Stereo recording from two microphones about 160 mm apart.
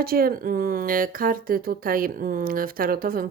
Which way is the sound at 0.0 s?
65° right (ahead or behind).